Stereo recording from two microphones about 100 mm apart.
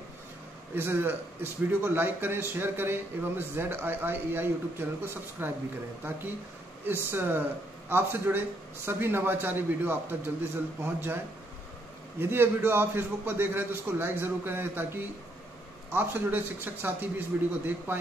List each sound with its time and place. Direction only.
0.7 s a man's voice: 20° right (ahead or behind)
6.9 s a man's voice: 20° right (ahead or behind)
12.2 s a man's voice: 25° right (ahead or behind)